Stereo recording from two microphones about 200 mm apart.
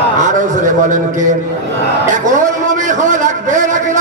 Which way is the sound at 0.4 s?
40° right (ahead or behind).